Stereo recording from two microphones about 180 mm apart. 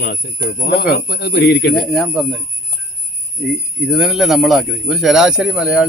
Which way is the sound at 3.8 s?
5° right (ahead or behind).